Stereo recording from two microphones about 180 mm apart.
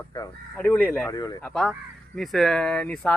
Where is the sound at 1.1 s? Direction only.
20° left (ahead or behind).